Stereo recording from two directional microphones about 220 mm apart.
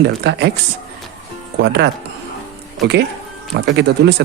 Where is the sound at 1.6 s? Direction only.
50° right (ahead or behind).